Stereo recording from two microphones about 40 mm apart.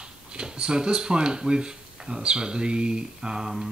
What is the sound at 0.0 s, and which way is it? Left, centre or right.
Speech, right.